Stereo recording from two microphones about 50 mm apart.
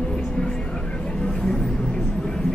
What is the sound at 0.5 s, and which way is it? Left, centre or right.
Vehicle, centre.